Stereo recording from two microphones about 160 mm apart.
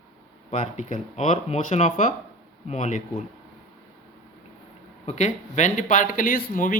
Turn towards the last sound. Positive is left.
turn(degrees=55)  # may be behind; listen again after turning